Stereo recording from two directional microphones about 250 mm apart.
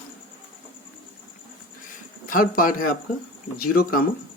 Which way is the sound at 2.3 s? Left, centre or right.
Left.